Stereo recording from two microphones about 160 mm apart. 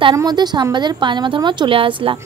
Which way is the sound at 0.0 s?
25° right (ahead or behind).